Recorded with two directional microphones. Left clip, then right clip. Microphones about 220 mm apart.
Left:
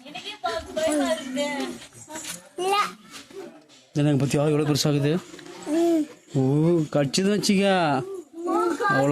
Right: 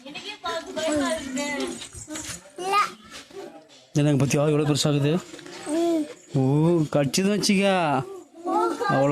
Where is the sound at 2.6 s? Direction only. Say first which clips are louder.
Even; 30° left (ahead or behind).